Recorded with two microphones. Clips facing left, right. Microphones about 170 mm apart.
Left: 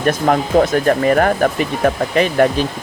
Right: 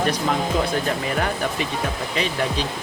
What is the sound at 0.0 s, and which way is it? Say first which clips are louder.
Speech: left 6 dB; 55° left (ahead or behind).